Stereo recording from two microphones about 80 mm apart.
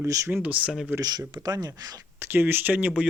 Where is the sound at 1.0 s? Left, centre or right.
Right.